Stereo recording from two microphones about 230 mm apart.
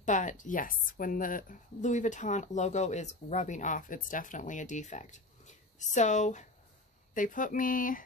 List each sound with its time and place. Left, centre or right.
0.0 s a woman's voice: left